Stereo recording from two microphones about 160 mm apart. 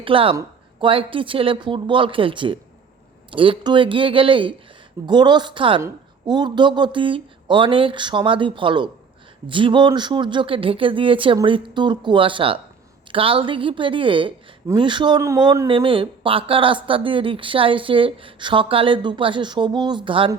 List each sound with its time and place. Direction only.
0.0 s speech: 35° right (ahead or behind)